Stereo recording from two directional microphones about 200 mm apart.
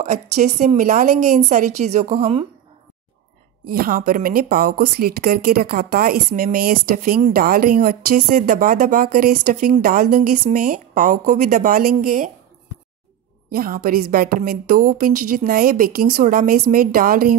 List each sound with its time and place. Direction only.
0.0 s a woman's voice: 40° right (ahead or behind)
3.6 s speech: 45° right (ahead or behind)
13.5 s speech: 45° right (ahead or behind)